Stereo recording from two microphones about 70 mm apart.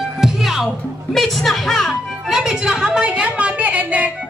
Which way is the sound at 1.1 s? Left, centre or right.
Centre.